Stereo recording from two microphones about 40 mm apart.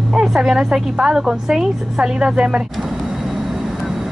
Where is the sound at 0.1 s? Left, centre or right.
Centre.